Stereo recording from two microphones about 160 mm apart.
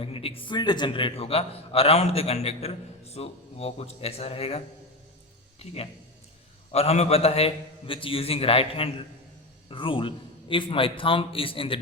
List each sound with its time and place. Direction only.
0.0 s a man's voice: 35° left (ahead or behind)